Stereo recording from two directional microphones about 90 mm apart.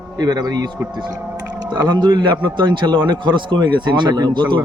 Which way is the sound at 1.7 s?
55° right (ahead or behind).